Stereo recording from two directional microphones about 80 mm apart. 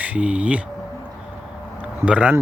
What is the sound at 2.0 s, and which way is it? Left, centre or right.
Speech, centre.